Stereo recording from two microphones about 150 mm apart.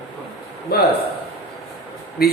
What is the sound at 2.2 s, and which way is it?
Speech, 90° left.